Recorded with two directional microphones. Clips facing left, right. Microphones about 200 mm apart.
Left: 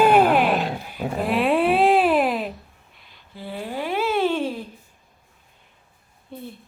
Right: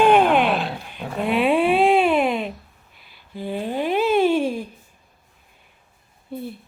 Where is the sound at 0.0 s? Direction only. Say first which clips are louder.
Right 1 dB; 5° left (ahead or behind).